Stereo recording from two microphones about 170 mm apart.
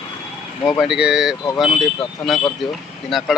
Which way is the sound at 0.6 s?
Centre (ahead or behind).